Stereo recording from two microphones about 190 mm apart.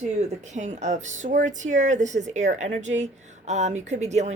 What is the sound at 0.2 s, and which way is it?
Speech, 35° right (ahead or behind).